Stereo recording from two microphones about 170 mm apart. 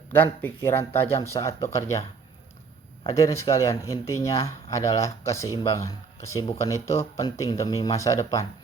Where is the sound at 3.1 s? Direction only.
20° left (ahead or behind).